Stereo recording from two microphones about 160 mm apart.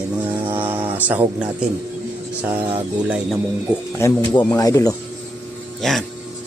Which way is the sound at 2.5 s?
10° right (ahead or behind).